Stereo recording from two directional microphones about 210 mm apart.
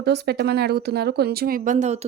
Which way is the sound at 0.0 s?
50° right (ahead or behind).